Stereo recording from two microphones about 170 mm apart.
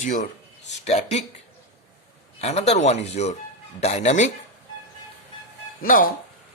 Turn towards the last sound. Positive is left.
turn(degrees=55)  # may be behind; listen again after turning